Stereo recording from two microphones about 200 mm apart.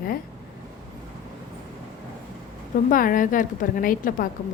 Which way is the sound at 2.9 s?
45° left (ahead or behind).